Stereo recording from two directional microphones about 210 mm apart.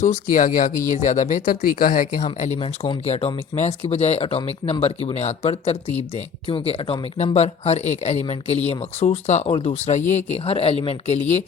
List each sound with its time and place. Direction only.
0.0 s speech: 40° left (ahead or behind)
2.6 s speech: 25° left (ahead or behind)